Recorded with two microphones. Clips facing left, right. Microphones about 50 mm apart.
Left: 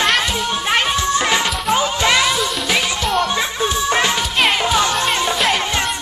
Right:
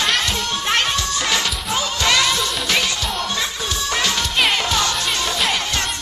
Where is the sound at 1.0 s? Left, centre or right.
Left; by 3.2 s centre.